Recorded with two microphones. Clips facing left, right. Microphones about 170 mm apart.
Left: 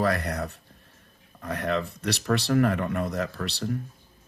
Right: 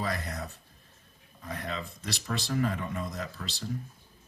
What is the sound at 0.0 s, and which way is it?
Speech, 65° left (ahead or behind).